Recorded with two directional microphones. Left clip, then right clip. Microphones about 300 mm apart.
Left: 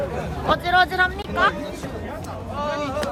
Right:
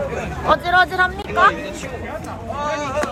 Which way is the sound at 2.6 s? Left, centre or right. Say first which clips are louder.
Right 2 dB; right.